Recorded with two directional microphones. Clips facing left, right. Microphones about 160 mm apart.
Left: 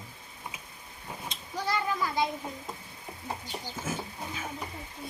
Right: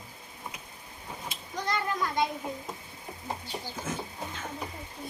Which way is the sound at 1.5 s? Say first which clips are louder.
Left 1 dB; 5° left (ahead or behind).